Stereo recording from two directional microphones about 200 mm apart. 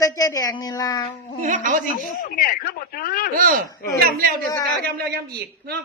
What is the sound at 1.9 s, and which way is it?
A man's voice, 45° left (ahead or behind).